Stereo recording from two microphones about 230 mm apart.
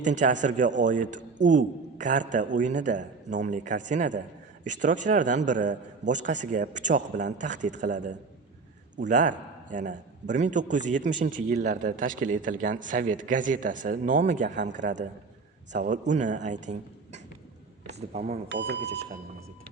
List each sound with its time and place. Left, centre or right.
0.0 s a man's voice: right
14.6 s speech: right
15.7 s speech: right
18.4 s speech: right